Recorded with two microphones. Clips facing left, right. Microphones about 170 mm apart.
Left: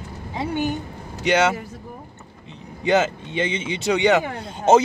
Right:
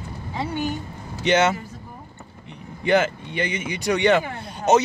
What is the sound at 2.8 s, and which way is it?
Speech, 20° left (ahead or behind).